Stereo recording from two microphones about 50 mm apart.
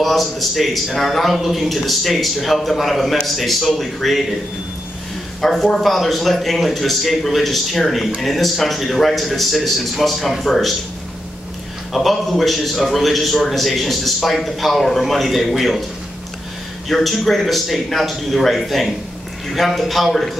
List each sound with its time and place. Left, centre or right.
0.0 s a man's voice: centre
5.4 s a man's voice: centre
11.9 s a man's voice: centre
16.9 s a man's voice: centre